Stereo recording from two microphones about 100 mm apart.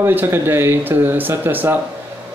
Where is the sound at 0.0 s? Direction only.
20° right (ahead or behind).